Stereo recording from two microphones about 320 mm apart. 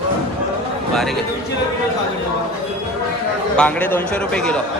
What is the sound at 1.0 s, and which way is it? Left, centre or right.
Speech, centre.